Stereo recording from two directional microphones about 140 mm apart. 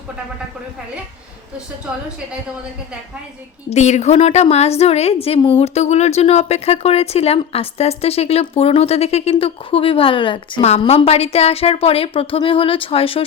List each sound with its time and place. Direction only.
3.7 s a woman's voice: 55° left (ahead or behind); by 10.7 s 35° left (ahead or behind)
10.7 s a woman's voice: 45° left (ahead or behind)